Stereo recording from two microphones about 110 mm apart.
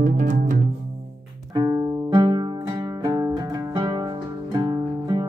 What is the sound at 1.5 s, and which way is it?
Music, 40° right (ahead or behind).